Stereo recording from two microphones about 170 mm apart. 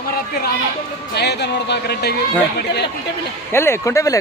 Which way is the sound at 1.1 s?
80° left.